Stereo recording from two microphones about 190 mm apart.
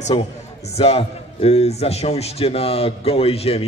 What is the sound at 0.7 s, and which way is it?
A man's voice, 30° left (ahead or behind).